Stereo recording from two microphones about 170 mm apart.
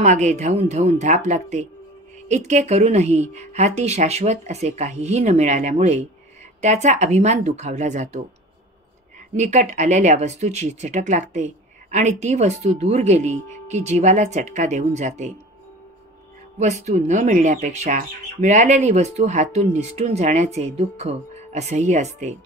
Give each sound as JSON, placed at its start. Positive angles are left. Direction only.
{"t": 0.0, "sound": "a woman's voice", "side_deg": -45}
{"t": 9.3, "sound": "speech", "side_deg": -45}
{"t": 16.5, "sound": "speech", "side_deg": -40}